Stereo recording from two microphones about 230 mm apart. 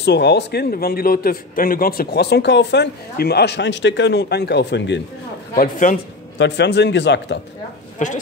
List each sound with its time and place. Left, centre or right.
0.0 s a man's voice: left
5.5 s a man's voice: left
6.3 s a man's voice: left
8.0 s a man's voice: left